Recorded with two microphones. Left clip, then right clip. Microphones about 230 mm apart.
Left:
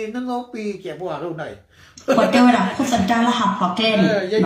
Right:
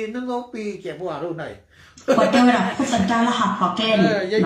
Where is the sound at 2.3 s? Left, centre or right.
Left.